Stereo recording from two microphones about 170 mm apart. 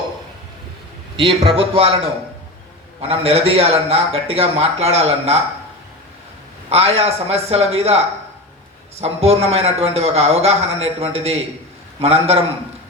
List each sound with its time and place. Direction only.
1.1 s a man's voice: 30° right (ahead or behind)
3.0 s a man's voice: 35° right (ahead or behind)
6.7 s a man's voice: 35° right (ahead or behind)